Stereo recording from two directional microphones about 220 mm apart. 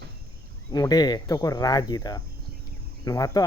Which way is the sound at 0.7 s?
15° left (ahead or behind).